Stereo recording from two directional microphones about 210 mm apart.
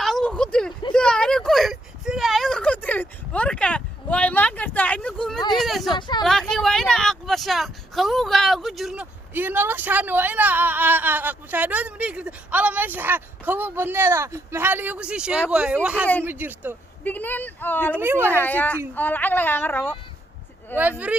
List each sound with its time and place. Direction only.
0.0 s a sound: centre (ahead or behind)
5.5 s speech: centre (ahead or behind)
6.0 s speech: 20° left (ahead or behind)
6.5 s speech: centre (ahead or behind)
17.0 s speech: 10° left (ahead or behind)
17.9 s speech: 10° right (ahead or behind)
18.3 s speech: 10° left (ahead or behind)